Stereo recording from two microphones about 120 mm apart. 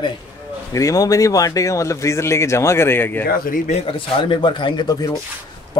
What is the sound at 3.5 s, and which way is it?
Speech, 70° left (ahead or behind).